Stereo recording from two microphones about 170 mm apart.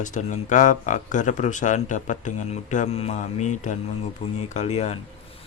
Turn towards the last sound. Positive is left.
turn(degrees=40)  # may be behind; listen again after turning